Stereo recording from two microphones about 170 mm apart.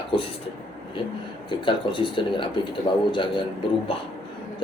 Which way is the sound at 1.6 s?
30° left (ahead or behind).